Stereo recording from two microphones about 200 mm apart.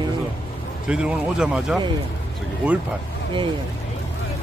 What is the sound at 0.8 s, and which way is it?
Speech, 5° right (ahead or behind).